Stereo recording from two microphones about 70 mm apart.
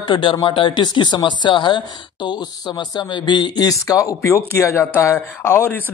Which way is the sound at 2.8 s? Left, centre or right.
Left.